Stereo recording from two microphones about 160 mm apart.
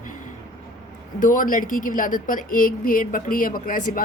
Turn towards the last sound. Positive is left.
turn(degrees=60)  # may be behind; listen again after turning